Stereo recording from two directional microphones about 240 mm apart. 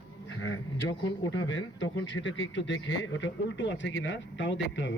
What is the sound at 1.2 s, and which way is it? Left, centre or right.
Speech, left.